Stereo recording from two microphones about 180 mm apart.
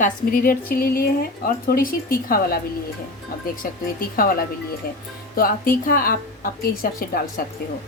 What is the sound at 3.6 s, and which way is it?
Speech, 55° left (ahead or behind).